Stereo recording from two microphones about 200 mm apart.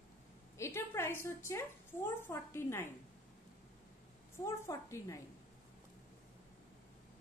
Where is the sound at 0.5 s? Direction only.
15° left (ahead or behind).